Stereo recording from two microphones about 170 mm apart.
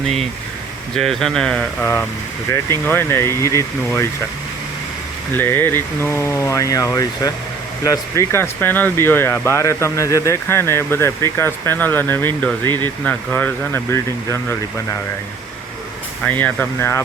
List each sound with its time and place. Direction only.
0.9 s speech: centre (ahead or behind)
5.3 s speech: 10° left (ahead or behind)
16.2 s speech: 10° left (ahead or behind)